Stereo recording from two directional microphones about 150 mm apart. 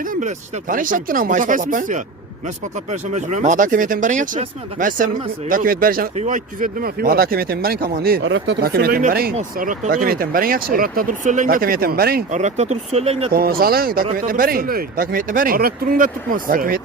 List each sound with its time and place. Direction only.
0.0 s speech: 60° right (ahead or behind)
6.1 s speech: 55° right (ahead or behind); by 9.3 s 75° right (ahead or behind)
9.6 s speech: 65° right (ahead or behind); by 12.2 s 90° right
12.3 s speech: 50° right (ahead or behind)
13.3 s speech: 90° right; by 16.8 s 70° right (ahead or behind)